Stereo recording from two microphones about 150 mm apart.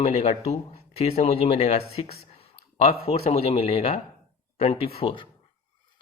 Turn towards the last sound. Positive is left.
turn(degrees=35)  # may be behind; listen again after turning